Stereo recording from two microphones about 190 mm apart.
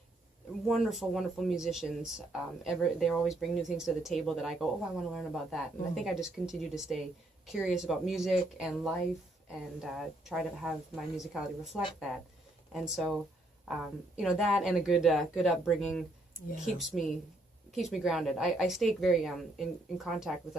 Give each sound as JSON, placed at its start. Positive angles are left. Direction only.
{"t": 0.7, "sound": "speech", "side_deg": 0}
{"t": 12.7, "sound": "speech", "side_deg": 0}
{"t": 14.2, "sound": "speech", "side_deg": 0}